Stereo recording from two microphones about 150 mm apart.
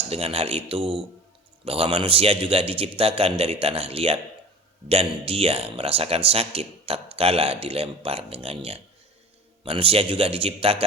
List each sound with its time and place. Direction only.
0.1 s speech: 40° right (ahead or behind)